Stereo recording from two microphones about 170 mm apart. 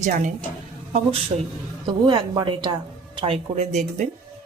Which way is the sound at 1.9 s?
25° right (ahead or behind).